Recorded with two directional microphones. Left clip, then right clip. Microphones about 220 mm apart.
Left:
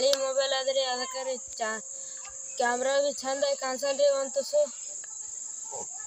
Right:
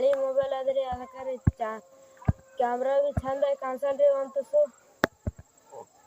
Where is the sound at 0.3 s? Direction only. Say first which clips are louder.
Even; centre (ahead or behind).